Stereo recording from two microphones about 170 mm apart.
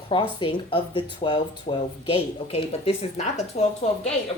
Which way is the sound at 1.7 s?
40° left (ahead or behind).